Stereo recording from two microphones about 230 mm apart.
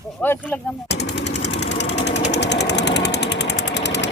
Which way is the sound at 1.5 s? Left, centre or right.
Left.